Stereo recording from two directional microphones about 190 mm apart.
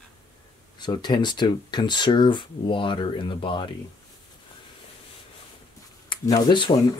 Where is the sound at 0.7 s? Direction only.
25° left (ahead or behind).